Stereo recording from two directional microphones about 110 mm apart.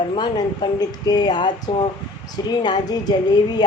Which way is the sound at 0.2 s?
40° left (ahead or behind).